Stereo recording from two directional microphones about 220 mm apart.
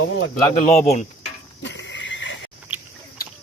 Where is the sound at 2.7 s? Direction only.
10° right (ahead or behind).